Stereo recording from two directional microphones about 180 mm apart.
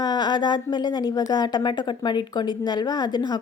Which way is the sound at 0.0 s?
25° left (ahead or behind).